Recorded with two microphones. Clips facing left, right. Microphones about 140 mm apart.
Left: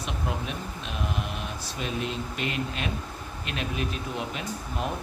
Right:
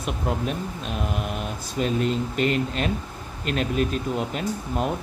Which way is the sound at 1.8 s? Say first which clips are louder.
Right 8 dB; 45° right (ahead or behind).